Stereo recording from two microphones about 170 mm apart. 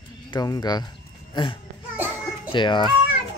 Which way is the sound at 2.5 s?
25° left (ahead or behind).